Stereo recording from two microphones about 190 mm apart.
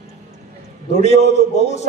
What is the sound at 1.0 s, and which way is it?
Speech, 35° left (ahead or behind).